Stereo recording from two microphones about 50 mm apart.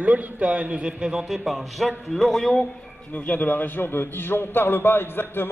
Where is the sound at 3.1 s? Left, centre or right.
Left.